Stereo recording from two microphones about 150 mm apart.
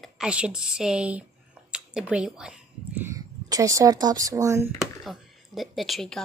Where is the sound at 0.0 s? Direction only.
5° right (ahead or behind).